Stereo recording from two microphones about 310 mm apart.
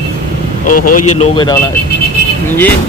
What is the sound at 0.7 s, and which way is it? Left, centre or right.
Speech, left.